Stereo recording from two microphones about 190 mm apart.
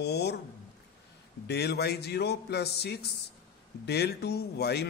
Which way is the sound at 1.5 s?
60° left (ahead or behind).